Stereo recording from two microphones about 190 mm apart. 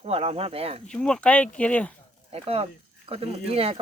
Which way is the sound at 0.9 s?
5° left (ahead or behind).